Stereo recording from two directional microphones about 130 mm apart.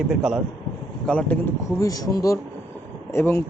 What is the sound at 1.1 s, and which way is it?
Speech, 10° left (ahead or behind).